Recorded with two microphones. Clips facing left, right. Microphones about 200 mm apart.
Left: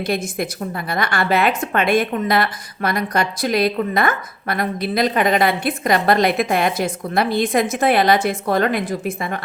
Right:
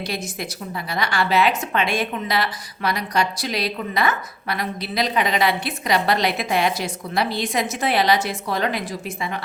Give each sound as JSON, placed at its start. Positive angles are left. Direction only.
{"t": 0.0, "sound": "a woman's voice", "side_deg": 55}